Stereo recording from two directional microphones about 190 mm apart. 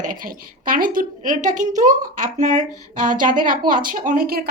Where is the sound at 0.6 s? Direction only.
45° right (ahead or behind).